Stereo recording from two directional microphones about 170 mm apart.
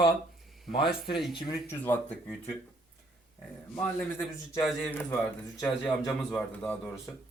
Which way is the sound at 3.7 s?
15° left (ahead or behind).